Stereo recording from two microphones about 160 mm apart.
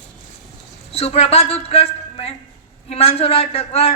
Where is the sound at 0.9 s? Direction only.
40° left (ahead or behind).